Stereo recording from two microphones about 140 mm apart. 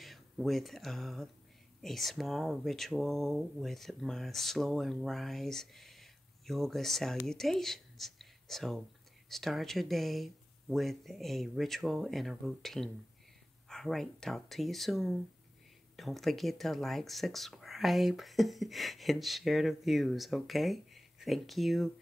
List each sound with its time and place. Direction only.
0.0 s speech: centre (ahead or behind)